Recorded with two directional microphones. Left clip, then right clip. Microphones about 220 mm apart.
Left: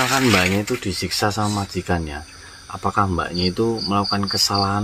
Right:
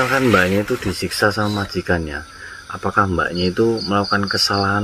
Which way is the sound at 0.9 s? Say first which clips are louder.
Right 4 dB; centre (ahead or behind).